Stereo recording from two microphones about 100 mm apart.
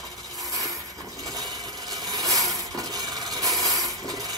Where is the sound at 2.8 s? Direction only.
35° right (ahead or behind).